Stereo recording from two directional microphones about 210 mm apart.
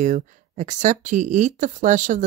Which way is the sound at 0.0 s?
35° right (ahead or behind).